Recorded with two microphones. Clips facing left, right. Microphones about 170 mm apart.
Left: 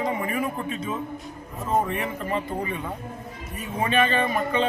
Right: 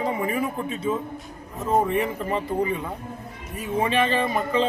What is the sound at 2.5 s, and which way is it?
Speech, 10° right (ahead or behind).